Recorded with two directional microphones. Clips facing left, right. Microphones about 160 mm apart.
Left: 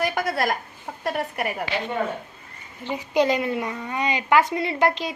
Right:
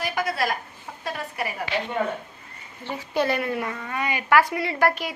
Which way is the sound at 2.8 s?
15° left (ahead or behind).